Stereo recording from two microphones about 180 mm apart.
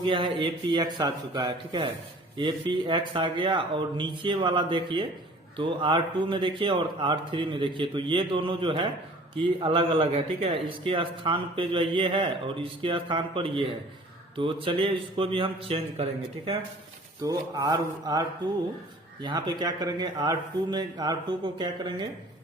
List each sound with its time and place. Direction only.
0.0 s speech: 25° right (ahead or behind)
17.2 s speech: 20° right (ahead or behind)